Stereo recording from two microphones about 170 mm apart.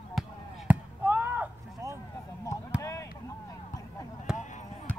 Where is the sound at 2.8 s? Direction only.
20° left (ahead or behind).